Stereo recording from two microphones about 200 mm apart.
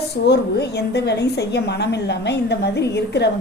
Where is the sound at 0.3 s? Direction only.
55° left (ahead or behind).